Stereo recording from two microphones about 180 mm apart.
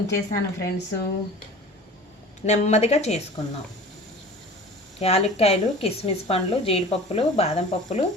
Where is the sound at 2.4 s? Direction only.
40° left (ahead or behind).